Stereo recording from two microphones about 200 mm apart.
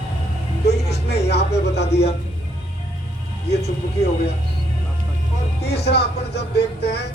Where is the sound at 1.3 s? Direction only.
55° left (ahead or behind).